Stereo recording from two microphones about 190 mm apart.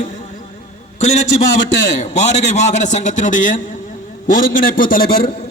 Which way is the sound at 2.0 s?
40° left (ahead or behind).